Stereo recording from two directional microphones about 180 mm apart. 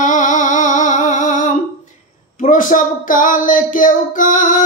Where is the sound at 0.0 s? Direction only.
45° left (ahead or behind).